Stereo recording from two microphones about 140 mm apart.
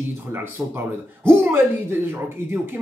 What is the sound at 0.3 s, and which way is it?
Speech, 15° right (ahead or behind).